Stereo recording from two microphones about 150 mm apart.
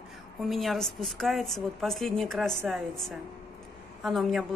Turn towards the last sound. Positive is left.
turn(degrees=0)  # may be behind; listen again after turning